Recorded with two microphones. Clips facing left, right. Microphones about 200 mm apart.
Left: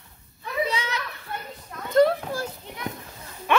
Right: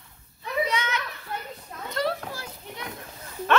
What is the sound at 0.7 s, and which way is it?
Children playing, 35° left (ahead or behind).